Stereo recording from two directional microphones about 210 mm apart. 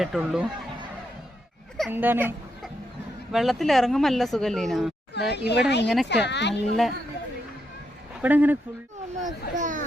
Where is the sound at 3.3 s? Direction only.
Centre (ahead or behind).